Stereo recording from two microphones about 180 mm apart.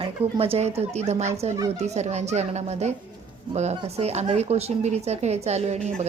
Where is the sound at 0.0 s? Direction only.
30° right (ahead or behind).